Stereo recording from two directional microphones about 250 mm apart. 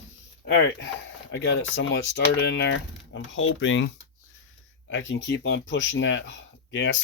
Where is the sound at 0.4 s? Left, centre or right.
Left.